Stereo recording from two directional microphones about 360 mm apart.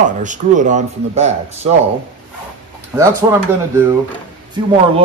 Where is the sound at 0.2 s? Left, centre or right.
Right.